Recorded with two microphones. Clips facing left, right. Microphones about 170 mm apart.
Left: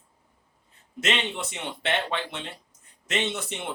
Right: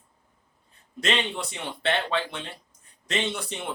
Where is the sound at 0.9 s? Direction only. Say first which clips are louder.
Right 1 dB; 20° left (ahead or behind).